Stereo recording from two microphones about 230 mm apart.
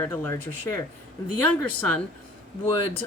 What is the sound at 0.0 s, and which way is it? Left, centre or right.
Speech, centre.